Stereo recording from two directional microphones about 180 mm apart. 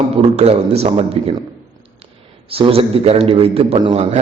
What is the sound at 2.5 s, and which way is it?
A man's voice, 30° right (ahead or behind).